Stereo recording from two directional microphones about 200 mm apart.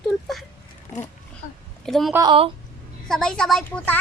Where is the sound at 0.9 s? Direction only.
15° left (ahead or behind).